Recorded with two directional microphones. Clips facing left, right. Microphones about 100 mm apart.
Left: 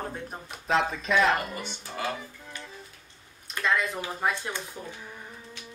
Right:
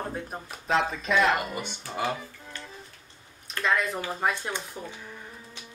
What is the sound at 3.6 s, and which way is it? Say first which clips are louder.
Speech: right 1 dB; centre (ahead or behind).